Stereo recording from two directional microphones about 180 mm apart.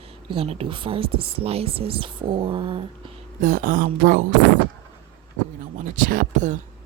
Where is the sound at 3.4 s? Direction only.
50° right (ahead or behind).